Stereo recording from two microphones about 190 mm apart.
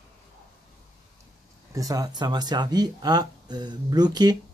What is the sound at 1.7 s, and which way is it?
Speech, 20° right (ahead or behind).